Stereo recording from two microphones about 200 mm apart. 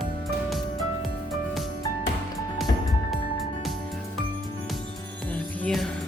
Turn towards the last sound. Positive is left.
turn(degrees=0)  # may be behind; listen again after turning